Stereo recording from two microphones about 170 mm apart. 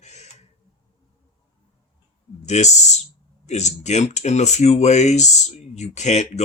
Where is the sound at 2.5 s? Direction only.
40° left (ahead or behind).